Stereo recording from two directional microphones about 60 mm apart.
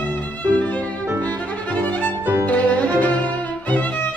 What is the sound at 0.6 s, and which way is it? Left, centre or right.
Music, left.